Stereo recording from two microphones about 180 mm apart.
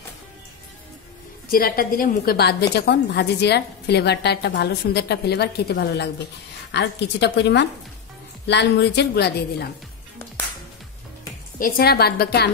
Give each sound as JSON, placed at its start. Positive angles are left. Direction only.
{"t": 1.5, "sound": "a woman's voice", "side_deg": 55}
{"t": 11.6, "sound": "a woman's voice", "side_deg": 55}